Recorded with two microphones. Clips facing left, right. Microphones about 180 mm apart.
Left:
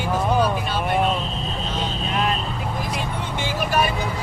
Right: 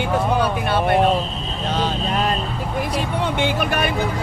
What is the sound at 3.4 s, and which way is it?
Speech, 60° right (ahead or behind).